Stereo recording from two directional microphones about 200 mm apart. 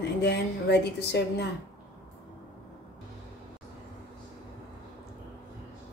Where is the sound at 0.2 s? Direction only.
60° left (ahead or behind).